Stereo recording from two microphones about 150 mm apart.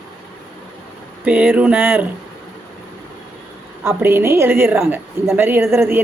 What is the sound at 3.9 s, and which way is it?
A woman's voice, 15° right (ahead or behind).